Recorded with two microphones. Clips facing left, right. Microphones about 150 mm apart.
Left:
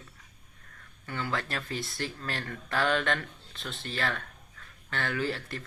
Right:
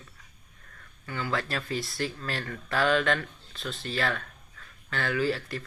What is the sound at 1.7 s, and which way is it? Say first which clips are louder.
Speech: right 5 dB; 20° left (ahead or behind).